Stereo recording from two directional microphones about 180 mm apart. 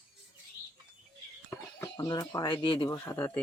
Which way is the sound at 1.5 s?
20° left (ahead or behind).